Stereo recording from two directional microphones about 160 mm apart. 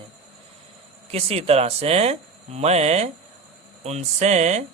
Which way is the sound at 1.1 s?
40° right (ahead or behind).